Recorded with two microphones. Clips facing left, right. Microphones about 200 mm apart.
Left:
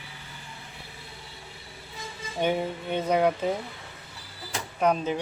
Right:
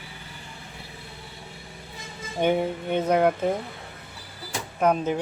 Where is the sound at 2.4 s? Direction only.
15° right (ahead or behind).